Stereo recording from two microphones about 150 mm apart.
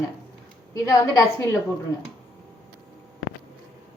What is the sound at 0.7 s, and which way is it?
Speech, 20° left (ahead or behind).